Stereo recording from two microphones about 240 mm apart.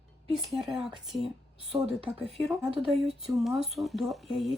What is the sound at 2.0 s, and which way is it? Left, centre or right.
Speech, right.